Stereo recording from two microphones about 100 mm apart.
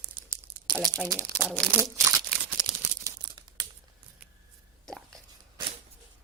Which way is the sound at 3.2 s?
45° right (ahead or behind).